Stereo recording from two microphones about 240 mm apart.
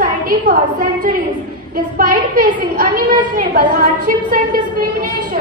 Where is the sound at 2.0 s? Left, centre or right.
Right.